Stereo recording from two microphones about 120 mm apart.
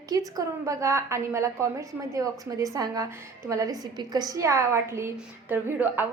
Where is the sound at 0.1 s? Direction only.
30° right (ahead or behind).